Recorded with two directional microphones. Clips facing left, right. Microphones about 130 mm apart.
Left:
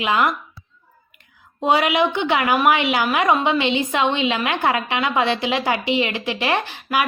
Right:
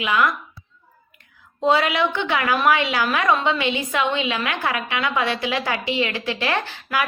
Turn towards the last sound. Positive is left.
turn(degrees=20)  # may be behind; listen again after turning